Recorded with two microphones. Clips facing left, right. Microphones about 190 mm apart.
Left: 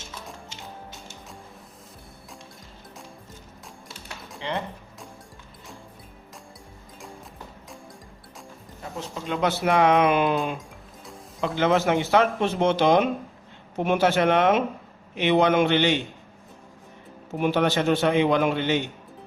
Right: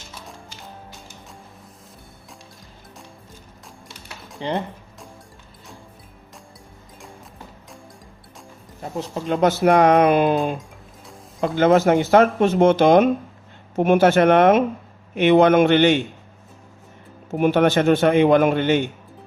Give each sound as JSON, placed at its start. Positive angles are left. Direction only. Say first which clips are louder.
{"t": 3.8, "sound": "music", "louder": "even", "side_deg": 0}
{"t": 9.2, "sound": "speech", "louder": "right 7 dB", "side_deg": -45}
{"t": 11.3, "sound": "speech", "louder": "right 6 dB", "side_deg": -50}
{"t": 17.3, "sound": "speech", "louder": "right 6 dB", "side_deg": -50}